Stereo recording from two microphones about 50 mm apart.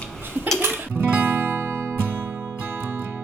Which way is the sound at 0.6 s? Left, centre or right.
Right.